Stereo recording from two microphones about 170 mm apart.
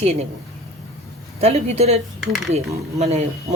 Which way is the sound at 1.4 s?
40° right (ahead or behind).